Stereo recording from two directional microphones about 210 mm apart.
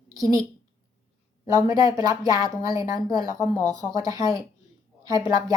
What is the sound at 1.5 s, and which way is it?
Speech, 15° right (ahead or behind).